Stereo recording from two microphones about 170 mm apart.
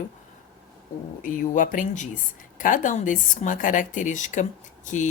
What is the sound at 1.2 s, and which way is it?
A woman's voice, 50° left (ahead or behind).